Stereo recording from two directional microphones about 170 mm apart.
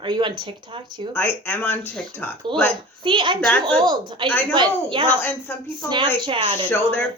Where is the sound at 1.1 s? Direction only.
10° left (ahead or behind).